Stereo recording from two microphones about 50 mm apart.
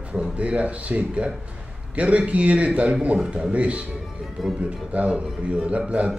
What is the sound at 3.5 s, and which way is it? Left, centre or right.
A man's voice, right.